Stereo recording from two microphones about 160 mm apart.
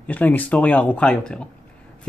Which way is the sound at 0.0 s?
10° left (ahead or behind).